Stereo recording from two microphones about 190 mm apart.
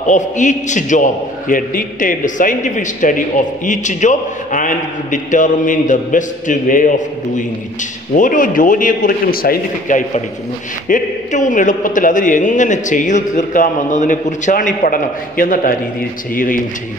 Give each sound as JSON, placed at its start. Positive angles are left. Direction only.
{"t": 0.0, "sound": "a man's voice", "side_deg": 40}